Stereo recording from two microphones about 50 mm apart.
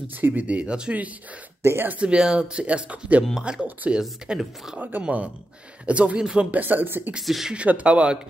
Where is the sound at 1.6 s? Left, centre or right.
Right.